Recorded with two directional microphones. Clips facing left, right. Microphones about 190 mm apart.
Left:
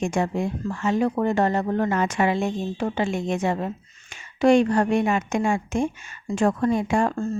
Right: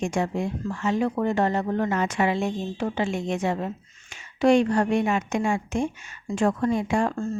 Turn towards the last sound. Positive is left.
turn(degrees=50)  # may be behind; listen again after turning